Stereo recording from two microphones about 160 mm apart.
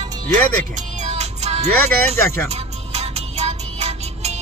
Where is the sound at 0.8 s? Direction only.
45° right (ahead or behind).